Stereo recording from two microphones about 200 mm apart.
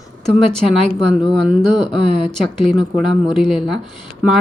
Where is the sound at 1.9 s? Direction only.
Centre (ahead or behind).